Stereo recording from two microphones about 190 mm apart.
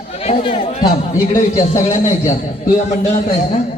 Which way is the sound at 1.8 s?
40° left (ahead or behind).